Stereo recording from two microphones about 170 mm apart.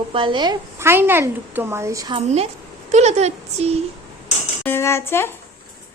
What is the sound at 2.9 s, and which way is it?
Speech, 40° right (ahead or behind).